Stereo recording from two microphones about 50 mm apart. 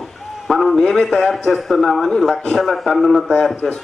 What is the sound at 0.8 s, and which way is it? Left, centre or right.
A man's voice, centre.